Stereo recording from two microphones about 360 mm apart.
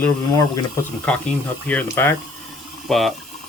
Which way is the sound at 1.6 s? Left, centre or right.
Centre.